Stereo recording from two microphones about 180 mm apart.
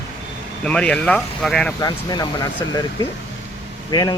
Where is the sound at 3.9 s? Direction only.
25° left (ahead or behind).